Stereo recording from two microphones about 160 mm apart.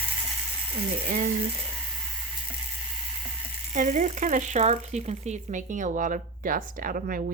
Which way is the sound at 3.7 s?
50° right (ahead or behind).